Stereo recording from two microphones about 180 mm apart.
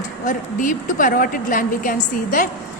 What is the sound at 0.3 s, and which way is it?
A woman's voice, 45° left (ahead or behind).